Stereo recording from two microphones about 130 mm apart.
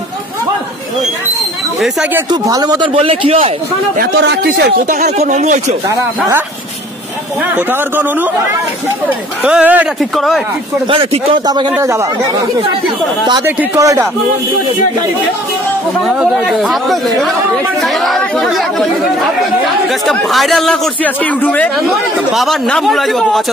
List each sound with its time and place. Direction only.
2.3 s speech: 30° right (ahead or behind)
2.9 s a man's voice: 45° right (ahead or behind)
4.8 s speech: 90° right
5.1 s speech: 60° right (ahead or behind)
7.5 s speech: 15° right (ahead or behind)
9.4 s speech: 10° right (ahead or behind)
9.9 s speech: centre (ahead or behind)
10.9 s a man's voice: 40° right (ahead or behind)
11.8 s speech: 25° right (ahead or behind)
13.7 s speech: 25° right (ahead or behind)
16.3 s speech: centre (ahead or behind)
21.8 s speech: centre (ahead or behind)